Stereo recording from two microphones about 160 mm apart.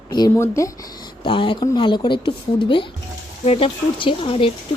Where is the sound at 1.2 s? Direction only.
30° left (ahead or behind).